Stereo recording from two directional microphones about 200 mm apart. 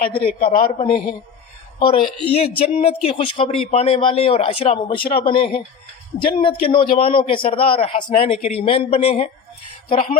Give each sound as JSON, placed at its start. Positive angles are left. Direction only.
{"t": 0.3, "sound": "a man's voice", "side_deg": 45}
{"t": 1.8, "sound": "speech", "side_deg": 25}